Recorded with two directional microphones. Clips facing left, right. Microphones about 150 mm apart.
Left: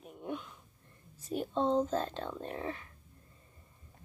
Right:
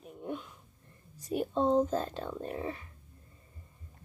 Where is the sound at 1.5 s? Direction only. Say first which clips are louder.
Right 2 dB; 10° right (ahead or behind).